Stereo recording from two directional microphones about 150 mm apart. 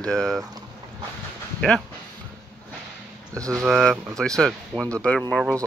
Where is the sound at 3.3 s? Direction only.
20° right (ahead or behind).